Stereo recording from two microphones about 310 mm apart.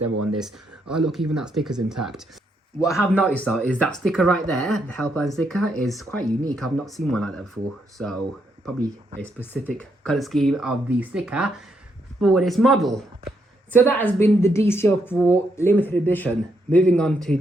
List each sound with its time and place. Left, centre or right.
0.0 s speech: right
0.3 s speech: centre
9.4 s speech: centre